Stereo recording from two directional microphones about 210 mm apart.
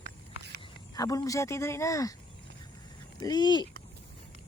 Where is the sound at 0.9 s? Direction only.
15° left (ahead or behind).